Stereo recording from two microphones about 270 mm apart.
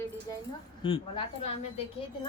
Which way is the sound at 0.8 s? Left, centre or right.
Centre.